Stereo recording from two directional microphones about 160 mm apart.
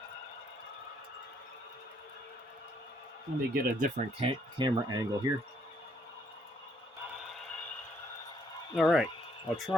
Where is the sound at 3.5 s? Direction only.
55° right (ahead or behind).